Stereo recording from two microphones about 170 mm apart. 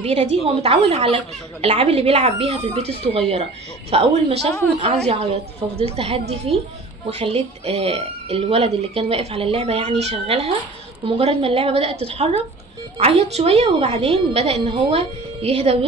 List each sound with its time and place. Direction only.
0.0 s speech: 35° right (ahead or behind)